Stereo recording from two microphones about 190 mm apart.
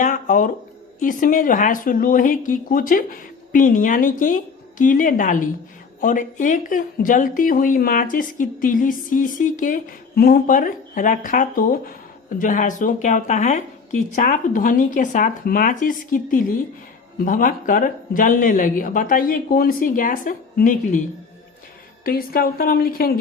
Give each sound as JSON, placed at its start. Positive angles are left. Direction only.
{"t": 0.0, "sound": "speech", "side_deg": 45}
{"t": 22.0, "sound": "speech", "side_deg": 50}